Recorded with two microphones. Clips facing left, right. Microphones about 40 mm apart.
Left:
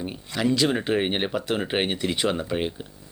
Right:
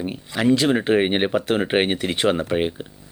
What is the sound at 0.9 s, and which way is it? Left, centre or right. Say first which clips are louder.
Speech: right 5 dB; right.